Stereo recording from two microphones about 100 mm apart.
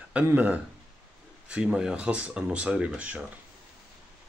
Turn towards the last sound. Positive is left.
turn(degrees=-10)  # may be behind; listen again after turning